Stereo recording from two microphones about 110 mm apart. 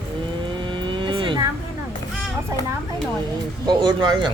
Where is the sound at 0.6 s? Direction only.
50° right (ahead or behind).